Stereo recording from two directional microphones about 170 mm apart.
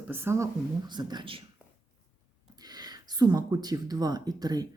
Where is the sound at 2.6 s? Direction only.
25° right (ahead or behind).